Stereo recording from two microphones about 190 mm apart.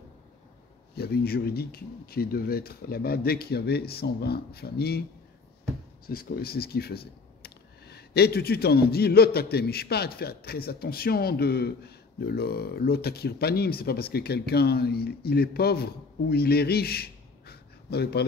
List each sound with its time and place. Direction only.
0.9 s speech: 55° left (ahead or behind)
6.0 s speech: 50° left (ahead or behind)